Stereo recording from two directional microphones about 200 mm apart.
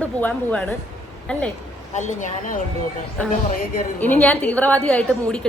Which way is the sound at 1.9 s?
40° left (ahead or behind).